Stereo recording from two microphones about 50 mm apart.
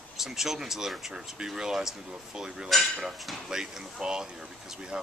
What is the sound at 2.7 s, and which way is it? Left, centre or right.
Speech, centre.